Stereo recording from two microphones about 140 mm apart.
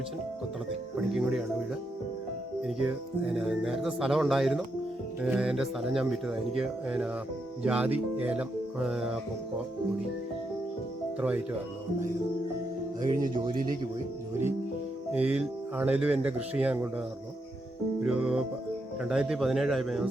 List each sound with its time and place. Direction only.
1.1 s speech: 5° right (ahead or behind)
2.6 s speech: 5° right (ahead or behind)
13.0 s speech: 25° right (ahead or behind)
15.3 s speech: 10° right (ahead or behind)
18.0 s speech: 5° right (ahead or behind)